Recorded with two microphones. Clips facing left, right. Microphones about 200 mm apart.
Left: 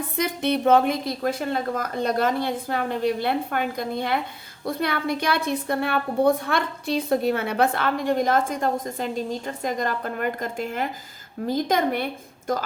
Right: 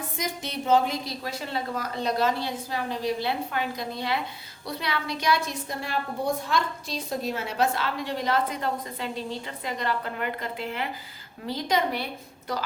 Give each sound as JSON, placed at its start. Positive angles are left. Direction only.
{"t": 0.2, "sound": "a woman's voice", "side_deg": 60}